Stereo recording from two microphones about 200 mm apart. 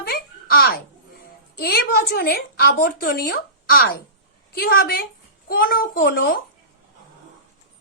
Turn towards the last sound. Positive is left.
turn(degrees=50)  # may be behind; listen again after turning